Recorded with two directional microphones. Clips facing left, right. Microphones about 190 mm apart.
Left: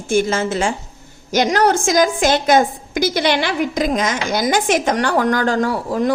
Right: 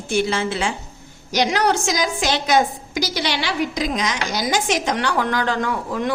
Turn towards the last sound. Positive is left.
turn(degrees=35)  # may be behind; listen again after turning